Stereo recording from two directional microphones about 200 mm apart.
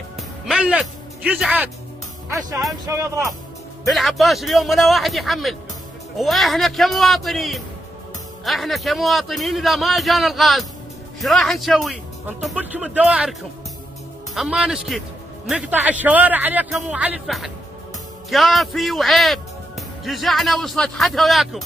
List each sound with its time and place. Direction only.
0.5 s speech: 5° right (ahead or behind)
3.9 s a man's voice: centre (ahead or behind)